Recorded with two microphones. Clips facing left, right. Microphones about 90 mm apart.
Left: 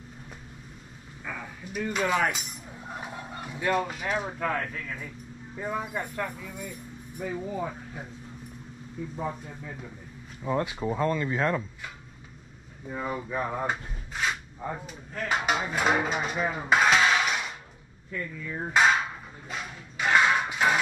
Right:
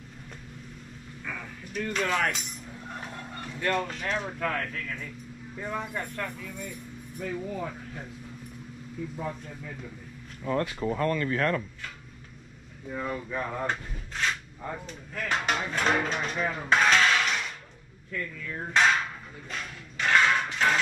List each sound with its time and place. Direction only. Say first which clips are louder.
1.2 s a sound: left 2 dB; 10° left (ahead or behind)
5.6 s speech: left 2 dB; 10° left (ahead or behind)
9.2 s speech: left 2 dB; 15° left (ahead or behind)
18.1 s hammer: left 1 dB; 15° left (ahead or behind)